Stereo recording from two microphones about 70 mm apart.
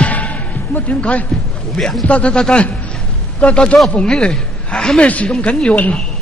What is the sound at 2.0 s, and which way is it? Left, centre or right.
A man's voice, centre.